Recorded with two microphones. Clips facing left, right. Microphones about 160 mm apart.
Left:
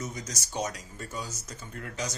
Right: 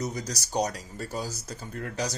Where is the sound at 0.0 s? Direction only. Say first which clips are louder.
Right 5 dB; 35° right (ahead or behind).